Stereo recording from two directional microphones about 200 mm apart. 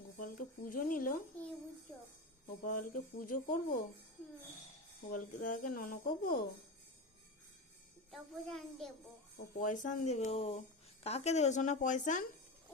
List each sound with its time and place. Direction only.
0.2 s speech: 45° left (ahead or behind)
2.6 s speech: 45° left (ahead or behind)
5.0 s speech: 40° left (ahead or behind)
8.1 s a child's voice: centre (ahead or behind)
9.6 s a woman's voice: 40° left (ahead or behind)